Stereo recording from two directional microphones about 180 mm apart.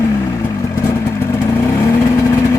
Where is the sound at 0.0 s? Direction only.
15° left (ahead or behind).